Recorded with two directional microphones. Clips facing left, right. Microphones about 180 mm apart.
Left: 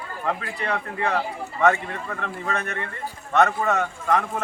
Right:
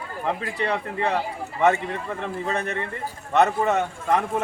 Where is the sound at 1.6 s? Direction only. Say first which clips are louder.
Even; 25° right (ahead or behind).